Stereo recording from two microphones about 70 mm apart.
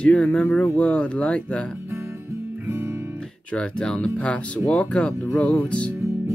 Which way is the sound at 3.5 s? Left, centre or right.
Centre.